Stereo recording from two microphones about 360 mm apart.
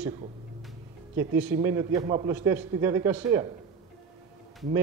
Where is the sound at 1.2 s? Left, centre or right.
Centre.